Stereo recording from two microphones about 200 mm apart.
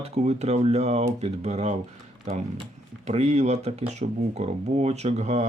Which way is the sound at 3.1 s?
35° right (ahead or behind).